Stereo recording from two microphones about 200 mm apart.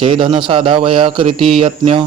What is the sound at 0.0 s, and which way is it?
A man's voice, 25° right (ahead or behind).